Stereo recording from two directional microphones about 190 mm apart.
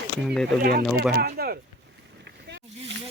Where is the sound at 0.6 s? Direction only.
50° right (ahead or behind).